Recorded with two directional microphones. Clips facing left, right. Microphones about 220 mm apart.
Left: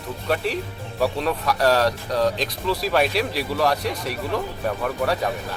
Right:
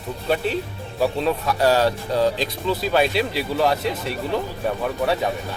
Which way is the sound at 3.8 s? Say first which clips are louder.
Right 2 dB; 25° right (ahead or behind).